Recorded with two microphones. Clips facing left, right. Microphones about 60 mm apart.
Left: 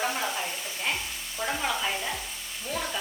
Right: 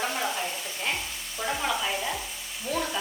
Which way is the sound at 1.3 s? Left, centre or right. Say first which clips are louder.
Right 1 dB; centre.